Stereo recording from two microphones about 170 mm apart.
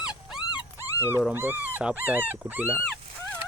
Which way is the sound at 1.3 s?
10° right (ahead or behind).